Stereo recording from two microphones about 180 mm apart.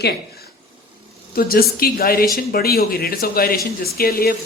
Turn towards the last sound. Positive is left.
turn(degrees=55)  # may be behind; listen again after turning